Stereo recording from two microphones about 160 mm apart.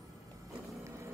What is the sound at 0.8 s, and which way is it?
Boat, 20° right (ahead or behind).